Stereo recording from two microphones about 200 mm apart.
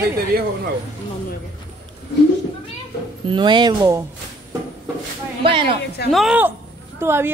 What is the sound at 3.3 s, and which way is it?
Speech, 25° right (ahead or behind).